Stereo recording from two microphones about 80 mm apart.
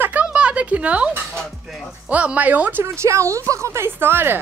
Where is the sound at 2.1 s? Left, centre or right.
Centre.